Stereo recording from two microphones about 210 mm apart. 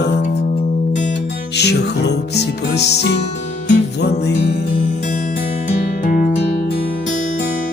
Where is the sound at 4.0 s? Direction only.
55° left (ahead or behind).